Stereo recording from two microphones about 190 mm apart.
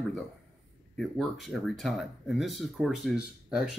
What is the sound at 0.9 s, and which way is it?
Speech, centre (ahead or behind).